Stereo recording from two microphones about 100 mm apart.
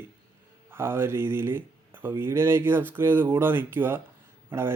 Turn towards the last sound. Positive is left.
turn(degrees=-25)  # may be behind; listen again after turning